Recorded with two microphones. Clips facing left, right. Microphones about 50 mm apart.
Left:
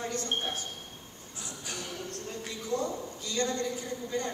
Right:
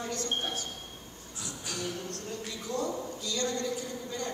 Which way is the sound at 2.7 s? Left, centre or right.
Left.